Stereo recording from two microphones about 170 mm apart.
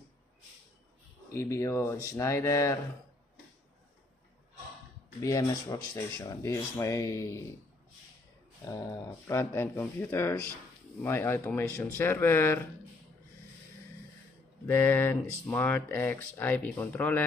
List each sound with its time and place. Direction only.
1.3 s speech: 15° left (ahead or behind)
5.2 s speech: 20° left (ahead or behind)
9.3 s speech: 15° left (ahead or behind)
14.7 s speech: 10° left (ahead or behind)